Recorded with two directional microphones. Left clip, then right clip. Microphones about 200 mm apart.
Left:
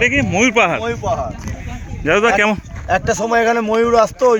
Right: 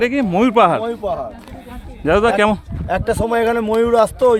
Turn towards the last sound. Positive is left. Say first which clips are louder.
# even
turn(degrees=-5)  # may be behind; listen again after turning